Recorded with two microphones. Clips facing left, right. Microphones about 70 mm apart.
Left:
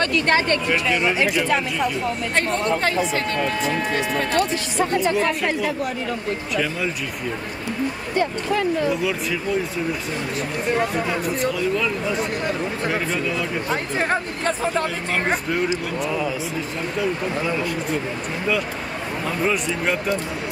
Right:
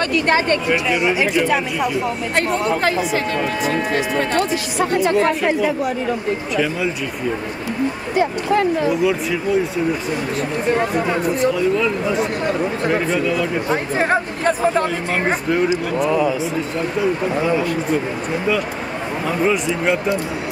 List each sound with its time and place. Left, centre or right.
0.0 s speech: centre
8.1 s speech: centre
10.7 s speech: centre
13.9 s speech: centre
19.4 s speech: centre